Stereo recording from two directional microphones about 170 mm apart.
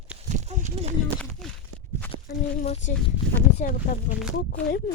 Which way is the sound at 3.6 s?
50° left (ahead or behind).